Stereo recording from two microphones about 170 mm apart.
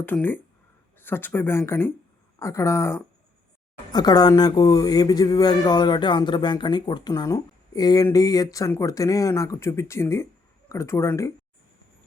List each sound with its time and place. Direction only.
0.0 s speech: 10° left (ahead or behind)